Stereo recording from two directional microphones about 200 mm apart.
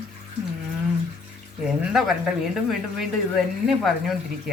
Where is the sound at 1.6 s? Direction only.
Centre (ahead or behind).